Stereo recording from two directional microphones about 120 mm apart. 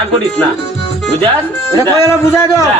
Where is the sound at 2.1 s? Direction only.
25° left (ahead or behind).